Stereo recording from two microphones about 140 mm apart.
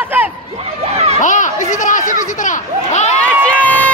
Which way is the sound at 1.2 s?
65° left (ahead or behind).